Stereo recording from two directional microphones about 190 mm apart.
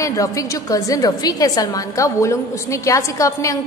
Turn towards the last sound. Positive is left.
turn(degrees=15)  # may be behind; listen again after turning